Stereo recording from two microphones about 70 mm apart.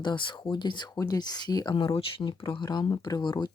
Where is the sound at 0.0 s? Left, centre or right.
Left.